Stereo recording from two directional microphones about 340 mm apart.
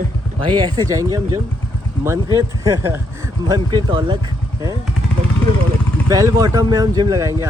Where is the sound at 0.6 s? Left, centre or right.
Centre.